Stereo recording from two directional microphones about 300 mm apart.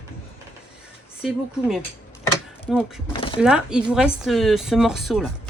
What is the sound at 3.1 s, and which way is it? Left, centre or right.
Speech, centre.